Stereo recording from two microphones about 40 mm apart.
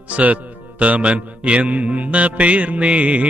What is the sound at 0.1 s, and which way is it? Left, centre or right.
Music, right.